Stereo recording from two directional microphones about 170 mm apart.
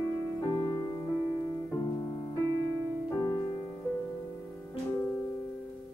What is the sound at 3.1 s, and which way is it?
Music, 20° left (ahead or behind).